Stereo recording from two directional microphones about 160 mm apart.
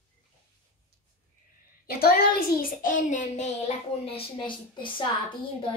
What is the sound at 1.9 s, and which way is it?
A child's voice, 70° left (ahead or behind).